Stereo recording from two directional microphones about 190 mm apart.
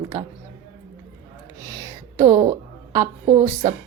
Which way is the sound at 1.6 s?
15° right (ahead or behind).